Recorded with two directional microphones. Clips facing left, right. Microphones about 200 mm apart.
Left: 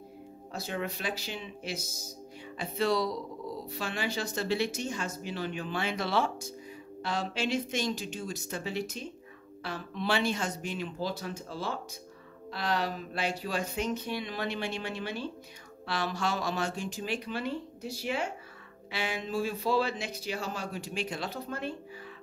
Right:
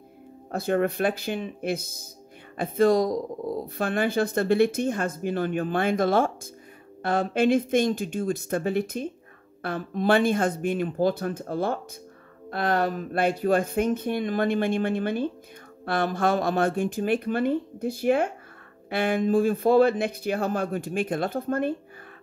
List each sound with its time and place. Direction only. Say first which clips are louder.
0.5 s speech: right 11 dB; 55° right (ahead or behind)